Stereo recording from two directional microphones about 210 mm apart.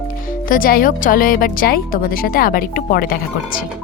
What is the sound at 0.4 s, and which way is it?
Speech, 40° left (ahead or behind).